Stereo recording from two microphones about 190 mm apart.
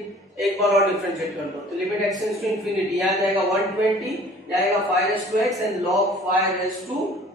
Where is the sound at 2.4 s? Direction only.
Centre (ahead or behind).